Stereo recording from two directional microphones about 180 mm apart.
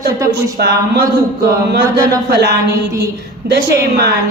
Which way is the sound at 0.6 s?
70° right (ahead or behind).